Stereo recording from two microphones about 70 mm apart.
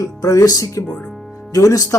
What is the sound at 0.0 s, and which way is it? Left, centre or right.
Speech, left.